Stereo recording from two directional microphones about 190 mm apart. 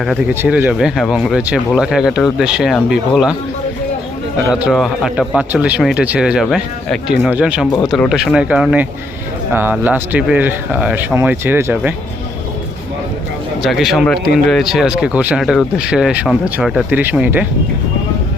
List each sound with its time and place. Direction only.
0.0 s speech: 5° right (ahead or behind)
4.5 s speech: centre (ahead or behind)
13.6 s speech: centre (ahead or behind)